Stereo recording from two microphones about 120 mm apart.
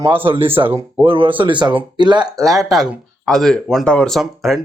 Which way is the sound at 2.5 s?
5° right (ahead or behind).